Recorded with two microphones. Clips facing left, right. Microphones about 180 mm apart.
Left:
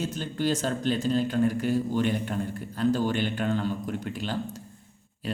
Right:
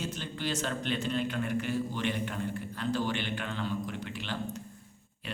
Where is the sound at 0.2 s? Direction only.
45° left (ahead or behind).